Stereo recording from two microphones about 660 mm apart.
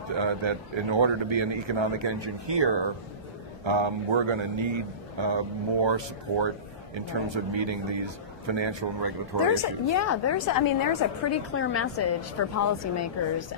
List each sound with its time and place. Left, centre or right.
0.2 s a man's voice: right
9.9 s a woman's voice: left
11.5 s a woman's voice: centre